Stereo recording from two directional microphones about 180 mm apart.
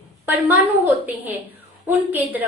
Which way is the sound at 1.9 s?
10° right (ahead or behind).